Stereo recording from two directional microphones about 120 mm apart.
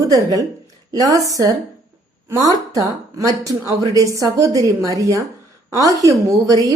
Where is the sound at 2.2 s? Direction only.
30° right (ahead or behind).